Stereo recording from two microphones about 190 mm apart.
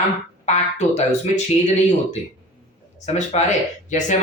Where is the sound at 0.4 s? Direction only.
35° left (ahead or behind).